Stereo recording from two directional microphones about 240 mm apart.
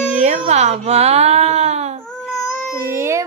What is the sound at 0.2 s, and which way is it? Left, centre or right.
Speech, right.